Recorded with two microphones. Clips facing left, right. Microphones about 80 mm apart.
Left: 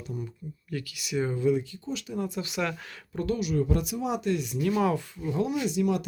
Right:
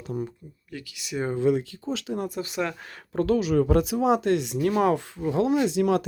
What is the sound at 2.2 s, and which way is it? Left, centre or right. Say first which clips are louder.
Speech: right 2 dB; right.